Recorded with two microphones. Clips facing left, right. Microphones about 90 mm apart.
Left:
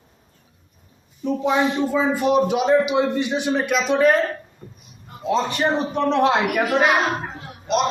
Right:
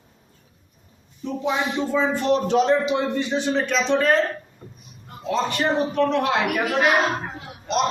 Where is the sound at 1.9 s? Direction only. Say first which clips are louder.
Left 1 dB; 10° left (ahead or behind).